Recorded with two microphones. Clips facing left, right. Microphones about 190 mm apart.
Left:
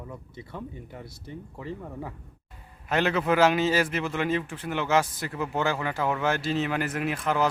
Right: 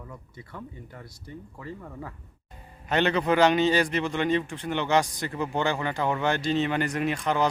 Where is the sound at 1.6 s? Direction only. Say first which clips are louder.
Left 3 dB; 10° left (ahead or behind).